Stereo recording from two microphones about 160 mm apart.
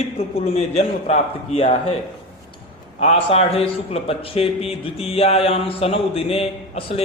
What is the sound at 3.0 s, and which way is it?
A man's voice, 40° left (ahead or behind).